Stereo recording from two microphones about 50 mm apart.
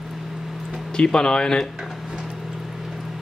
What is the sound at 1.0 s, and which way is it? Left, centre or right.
Speech, centre.